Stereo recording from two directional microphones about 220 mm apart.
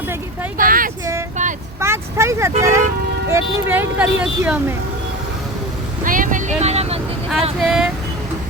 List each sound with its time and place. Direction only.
0.5 s speech: 40° right (ahead or behind)
1.8 s speech: 10° right (ahead or behind)
6.1 s vehicle: 35° right (ahead or behind)
7.6 s speech: centre (ahead or behind)